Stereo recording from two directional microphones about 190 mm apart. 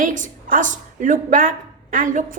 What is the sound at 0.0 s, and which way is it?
A woman's voice, 45° right (ahead or behind).